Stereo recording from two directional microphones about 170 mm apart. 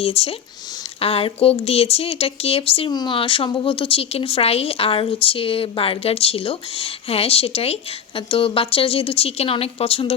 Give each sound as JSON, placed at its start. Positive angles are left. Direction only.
{"t": 0.0, "sound": "speech", "side_deg": 35}